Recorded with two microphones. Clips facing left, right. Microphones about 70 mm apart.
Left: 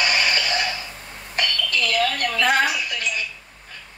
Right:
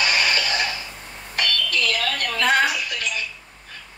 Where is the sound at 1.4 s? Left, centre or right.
Left.